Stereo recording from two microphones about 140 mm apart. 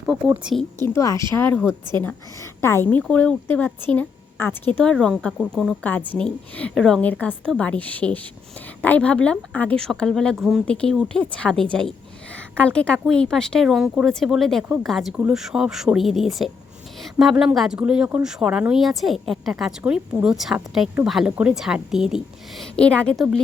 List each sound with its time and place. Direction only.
0.9 s a woman's voice: 20° left (ahead or behind); by 23.2 s 5° left (ahead or behind)